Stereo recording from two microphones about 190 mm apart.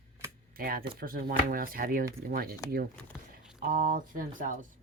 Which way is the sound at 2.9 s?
5° left (ahead or behind).